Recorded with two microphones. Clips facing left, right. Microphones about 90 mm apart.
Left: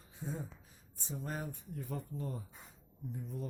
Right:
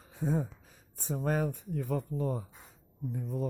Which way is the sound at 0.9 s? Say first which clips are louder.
Right 10 dB; 70° right (ahead or behind).